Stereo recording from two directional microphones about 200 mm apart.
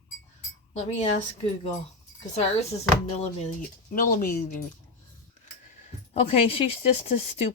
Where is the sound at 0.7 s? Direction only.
35° left (ahead or behind).